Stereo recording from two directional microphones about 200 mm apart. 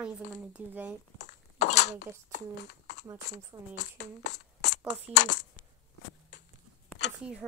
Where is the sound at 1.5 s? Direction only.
35° left (ahead or behind).